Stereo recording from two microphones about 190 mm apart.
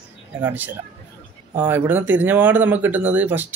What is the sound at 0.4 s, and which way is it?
Speech, 10° right (ahead or behind).